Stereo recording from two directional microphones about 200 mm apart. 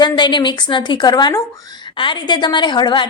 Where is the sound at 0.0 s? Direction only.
20° left (ahead or behind).